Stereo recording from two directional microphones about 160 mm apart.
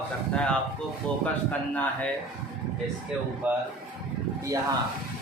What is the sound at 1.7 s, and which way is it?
Speech, 10° left (ahead or behind).